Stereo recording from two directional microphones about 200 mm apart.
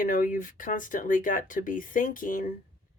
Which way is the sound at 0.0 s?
40° left (ahead or behind).